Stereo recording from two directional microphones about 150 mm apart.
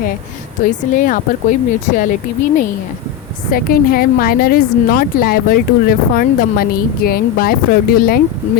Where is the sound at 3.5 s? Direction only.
75° left (ahead or behind).